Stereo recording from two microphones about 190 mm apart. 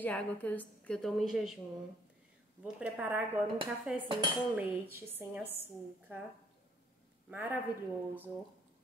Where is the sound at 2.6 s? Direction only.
5° right (ahead or behind).